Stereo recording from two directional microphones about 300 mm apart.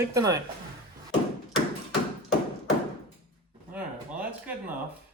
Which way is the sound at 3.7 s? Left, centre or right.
Centre.